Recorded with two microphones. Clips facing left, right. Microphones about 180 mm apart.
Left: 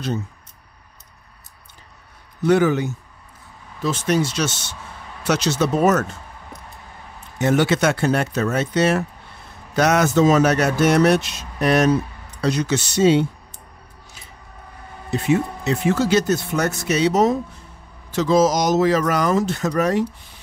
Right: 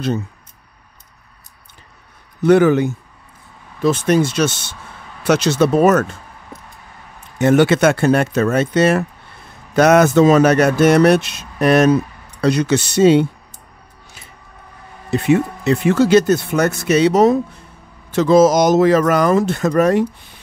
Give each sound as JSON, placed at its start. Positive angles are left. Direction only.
{"t": 2.4, "sound": "speech", "side_deg": -55}
{"t": 7.3, "sound": "speech", "side_deg": -55}
{"t": 15.1, "sound": "speech", "side_deg": -65}